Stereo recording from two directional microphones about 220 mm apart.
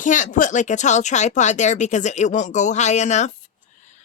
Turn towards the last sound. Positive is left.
turn(degrees=30)  # may be behind; listen again after turning